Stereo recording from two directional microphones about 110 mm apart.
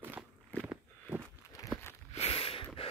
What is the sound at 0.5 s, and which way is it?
Walk, 15° left (ahead or behind).